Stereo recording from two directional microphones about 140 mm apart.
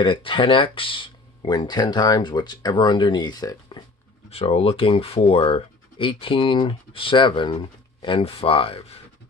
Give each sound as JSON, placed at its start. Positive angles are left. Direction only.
{"t": 0.0, "sound": "speech", "side_deg": 35}
{"t": 4.3, "sound": "speech", "side_deg": 45}